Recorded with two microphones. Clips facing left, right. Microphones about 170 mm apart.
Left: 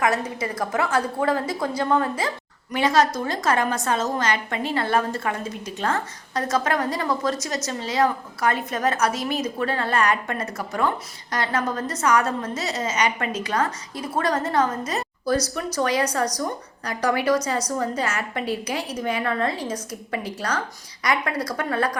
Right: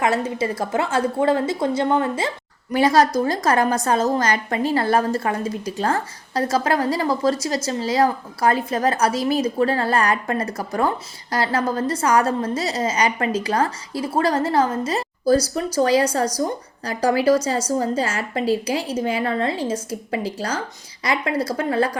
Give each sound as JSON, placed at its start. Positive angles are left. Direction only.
{"t": 0.0, "sound": "a woman's voice", "side_deg": -25}
{"t": 2.7, "sound": "a woman's voice", "side_deg": -35}